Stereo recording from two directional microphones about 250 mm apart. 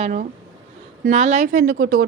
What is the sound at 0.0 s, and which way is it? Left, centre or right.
Speech, right.